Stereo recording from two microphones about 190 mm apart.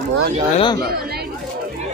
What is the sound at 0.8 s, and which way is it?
Speech, 55° right (ahead or behind).